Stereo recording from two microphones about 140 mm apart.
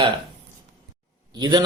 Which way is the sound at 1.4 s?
30° right (ahead or behind).